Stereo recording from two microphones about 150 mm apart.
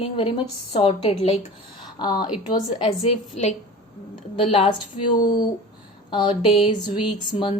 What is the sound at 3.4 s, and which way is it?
Speech, 50° left (ahead or behind).